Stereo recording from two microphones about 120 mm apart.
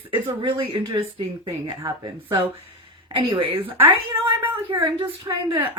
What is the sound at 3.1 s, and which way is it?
Speech, 50° right (ahead or behind).